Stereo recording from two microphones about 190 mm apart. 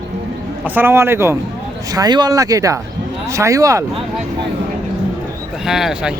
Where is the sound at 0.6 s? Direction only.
10° right (ahead or behind).